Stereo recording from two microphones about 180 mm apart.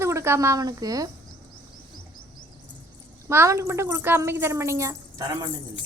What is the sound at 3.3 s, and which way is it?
A woman's voice, 15° right (ahead or behind).